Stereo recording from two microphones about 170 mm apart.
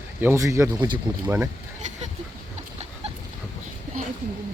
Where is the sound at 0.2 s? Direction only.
15° right (ahead or behind).